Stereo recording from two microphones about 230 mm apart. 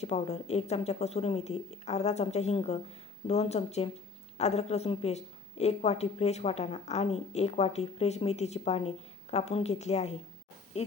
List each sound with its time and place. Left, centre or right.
0.0 s a woman's voice: left